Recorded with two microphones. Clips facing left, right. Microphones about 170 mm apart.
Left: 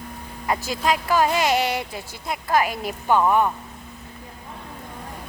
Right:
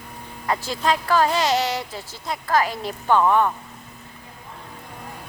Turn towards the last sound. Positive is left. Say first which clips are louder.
# right 1 dB
turn(degrees=10)  # may be behind; listen again after turning